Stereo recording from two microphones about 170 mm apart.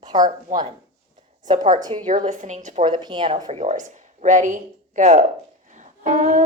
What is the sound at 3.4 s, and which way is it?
Speech, 45° right (ahead or behind).